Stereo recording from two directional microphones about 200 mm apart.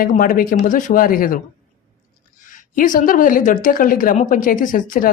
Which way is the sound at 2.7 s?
40° left (ahead or behind).